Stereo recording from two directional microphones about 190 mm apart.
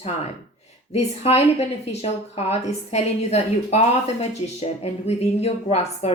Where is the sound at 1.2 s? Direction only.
35° left (ahead or behind).